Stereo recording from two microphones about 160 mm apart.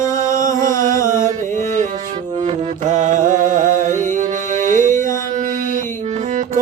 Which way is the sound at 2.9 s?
50° right (ahead or behind).